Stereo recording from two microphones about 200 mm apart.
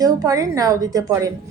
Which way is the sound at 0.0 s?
15° right (ahead or behind).